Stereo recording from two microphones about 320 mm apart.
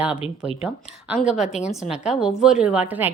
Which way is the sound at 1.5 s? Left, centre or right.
Left.